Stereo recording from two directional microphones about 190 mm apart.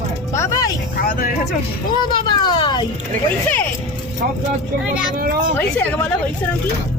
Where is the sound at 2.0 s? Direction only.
25° left (ahead or behind).